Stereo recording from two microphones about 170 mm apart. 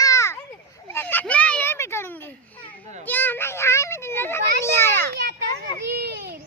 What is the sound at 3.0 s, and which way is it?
Children playing, 10° left (ahead or behind).